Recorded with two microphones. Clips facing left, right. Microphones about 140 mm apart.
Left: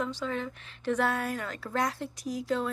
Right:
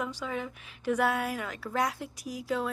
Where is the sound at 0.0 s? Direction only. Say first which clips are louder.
Left 2 dB; 10° right (ahead or behind).